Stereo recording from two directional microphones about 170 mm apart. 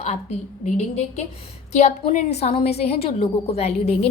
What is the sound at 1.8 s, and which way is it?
A woman's voice, 45° left (ahead or behind).